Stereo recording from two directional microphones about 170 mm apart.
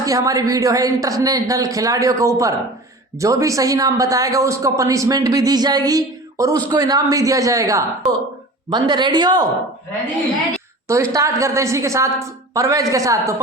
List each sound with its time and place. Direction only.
0.0 s speech: 20° right (ahead or behind)
10.8 s a woman's voice: 15° right (ahead or behind)